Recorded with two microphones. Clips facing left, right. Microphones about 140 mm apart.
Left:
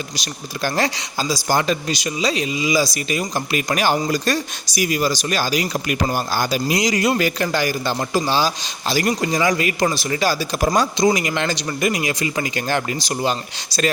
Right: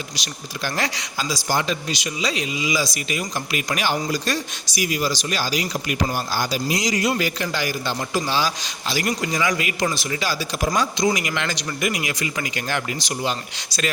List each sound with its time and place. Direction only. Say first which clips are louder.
0.2 s speech: left 6 dB; 40° left (ahead or behind)
1.5 s speech: left 4 dB; 45° left (ahead or behind)